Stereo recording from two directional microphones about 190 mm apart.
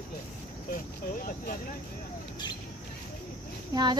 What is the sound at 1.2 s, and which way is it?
Speech, 50° left (ahead or behind).